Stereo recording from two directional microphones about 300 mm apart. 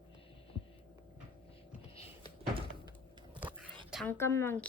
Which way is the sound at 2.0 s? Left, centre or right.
Centre.